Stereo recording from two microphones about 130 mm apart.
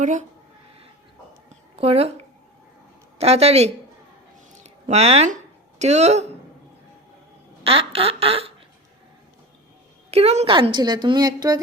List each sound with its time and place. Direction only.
0.0 s speech: 70° right (ahead or behind)
1.5 s a sound: 50° right (ahead or behind)
3.2 s speech: 55° right (ahead or behind)
4.6 s a sound: 55° right (ahead or behind)
5.8 s speech: 60° right (ahead or behind)
7.6 s squawk: 45° right (ahead or behind)
10.1 s a woman's voice: 55° right (ahead or behind)
10.5 s a woman's voice: 40° right (ahead or behind)